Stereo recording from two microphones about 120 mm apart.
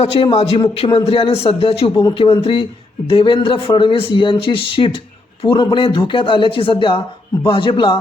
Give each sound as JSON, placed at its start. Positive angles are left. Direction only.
{"t": 0.0, "sound": "a man's voice", "side_deg": 55}